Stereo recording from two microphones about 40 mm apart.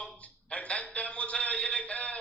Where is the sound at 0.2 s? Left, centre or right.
Left.